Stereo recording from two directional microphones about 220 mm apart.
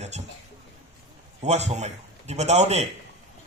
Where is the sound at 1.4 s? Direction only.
30° right (ahead or behind).